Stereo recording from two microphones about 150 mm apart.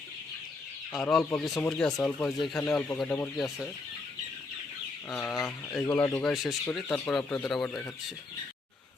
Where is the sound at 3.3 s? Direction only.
Centre (ahead or behind).